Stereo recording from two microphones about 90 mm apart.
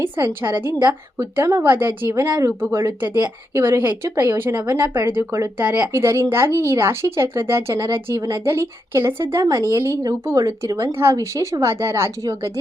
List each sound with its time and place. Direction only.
0.4 s a woman's voice: 20° right (ahead or behind)
1.2 s a woman's voice: 35° right (ahead or behind)
5.5 s speech: 15° right (ahead or behind)
5.9 s a woman's voice: 30° right (ahead or behind)